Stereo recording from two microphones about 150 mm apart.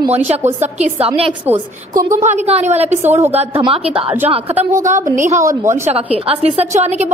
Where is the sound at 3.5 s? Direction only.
40° right (ahead or behind).